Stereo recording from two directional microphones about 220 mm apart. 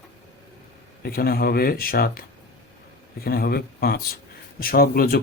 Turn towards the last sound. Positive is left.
turn(degrees=40)  # may be behind; listen again after turning